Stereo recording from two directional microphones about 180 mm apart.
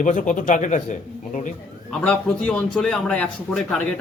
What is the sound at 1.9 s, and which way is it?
A man's voice, 5° left (ahead or behind).